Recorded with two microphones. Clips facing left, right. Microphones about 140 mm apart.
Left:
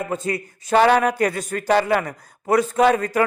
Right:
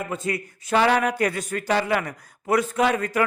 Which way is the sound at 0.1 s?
35° left (ahead or behind).